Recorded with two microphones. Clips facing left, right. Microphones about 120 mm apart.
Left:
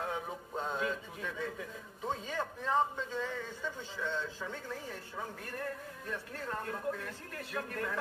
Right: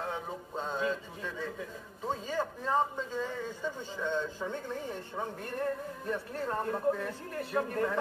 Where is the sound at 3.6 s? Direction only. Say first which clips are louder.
Right 5 dB; 15° right (ahead or behind).